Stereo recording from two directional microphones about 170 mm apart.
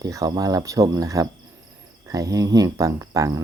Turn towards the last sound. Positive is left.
turn(degrees=-20)  # may be behind; listen again after turning